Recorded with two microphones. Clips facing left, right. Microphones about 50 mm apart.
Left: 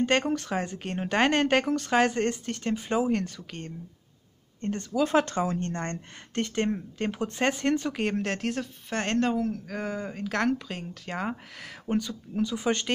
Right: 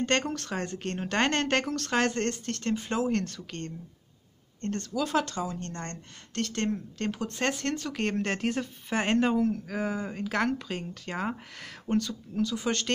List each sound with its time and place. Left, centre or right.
0.0 s speech: centre
8.0 s speech: centre
11.8 s speech: centre